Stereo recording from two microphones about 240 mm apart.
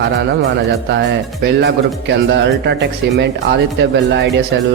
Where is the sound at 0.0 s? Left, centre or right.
Right.